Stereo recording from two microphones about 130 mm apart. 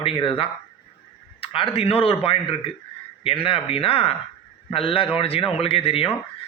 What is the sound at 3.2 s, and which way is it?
A man's voice, 45° left (ahead or behind).